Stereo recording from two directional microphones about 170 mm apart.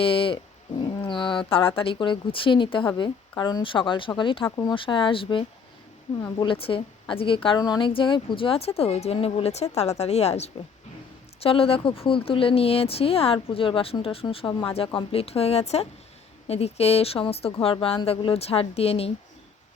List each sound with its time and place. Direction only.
0.0 s a woman's voice: 30° left (ahead or behind)